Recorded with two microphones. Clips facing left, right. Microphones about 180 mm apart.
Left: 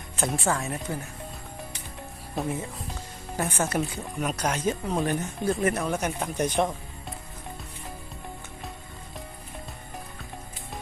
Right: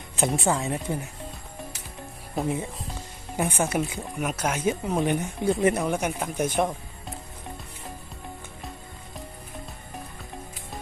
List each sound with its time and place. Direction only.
0.2 s speech: 20° right (ahead or behind)
2.4 s speech: 20° right (ahead or behind)